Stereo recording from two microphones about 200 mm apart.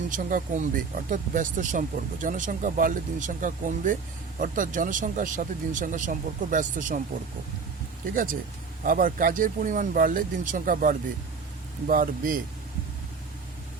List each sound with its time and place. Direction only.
0.1 s speech: 40° right (ahead or behind)
8.1 s speech: 45° right (ahead or behind)